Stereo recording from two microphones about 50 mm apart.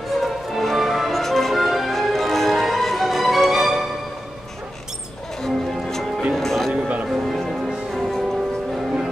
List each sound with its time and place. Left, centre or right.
0.2 s music: centre
5.4 s music: centre
6.7 s music: right
7.1 s music: centre